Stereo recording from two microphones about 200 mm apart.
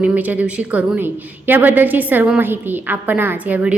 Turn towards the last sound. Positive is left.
turn(degrees=-10)  # may be behind; listen again after turning